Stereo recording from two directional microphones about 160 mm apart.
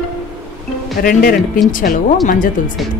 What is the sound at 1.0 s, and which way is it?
Speech, 65° left (ahead or behind).